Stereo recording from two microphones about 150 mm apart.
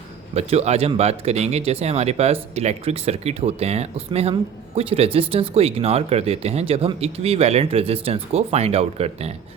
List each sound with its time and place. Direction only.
0.3 s speech: 45° right (ahead or behind)